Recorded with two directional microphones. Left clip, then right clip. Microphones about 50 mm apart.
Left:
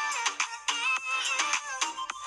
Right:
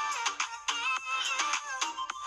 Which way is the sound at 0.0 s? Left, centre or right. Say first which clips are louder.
Left 2 dB; left.